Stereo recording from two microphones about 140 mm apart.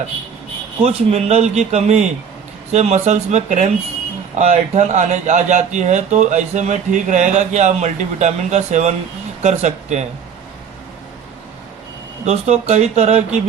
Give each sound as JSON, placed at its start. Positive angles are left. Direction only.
{"t": 0.8, "sound": "a man's voice", "side_deg": -50}
{"t": 12.2, "sound": "a man's voice", "side_deg": -50}